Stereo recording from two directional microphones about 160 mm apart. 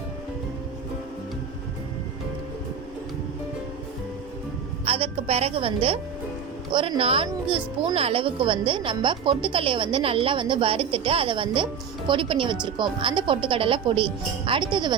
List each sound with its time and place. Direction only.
4.9 s a woman's voice: 35° right (ahead or behind)